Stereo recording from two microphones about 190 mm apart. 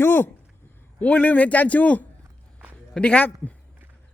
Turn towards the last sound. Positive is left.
turn(degrees=5)  # may be behind; listen again after turning